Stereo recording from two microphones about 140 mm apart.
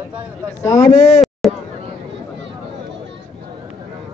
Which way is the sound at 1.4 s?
Centre (ahead or behind).